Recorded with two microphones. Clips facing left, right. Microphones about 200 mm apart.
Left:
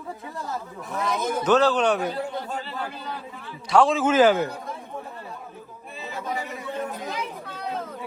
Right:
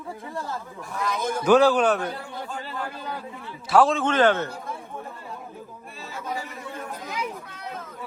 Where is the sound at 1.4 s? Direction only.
10° right (ahead or behind).